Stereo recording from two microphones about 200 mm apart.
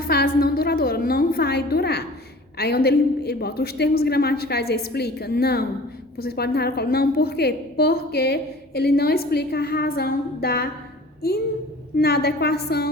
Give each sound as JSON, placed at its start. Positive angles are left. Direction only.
{"t": 0.0, "sound": "a woman's voice", "side_deg": 50}